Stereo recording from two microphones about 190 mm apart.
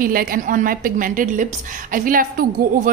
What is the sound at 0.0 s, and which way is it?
A woman's voice, 50° right (ahead or behind).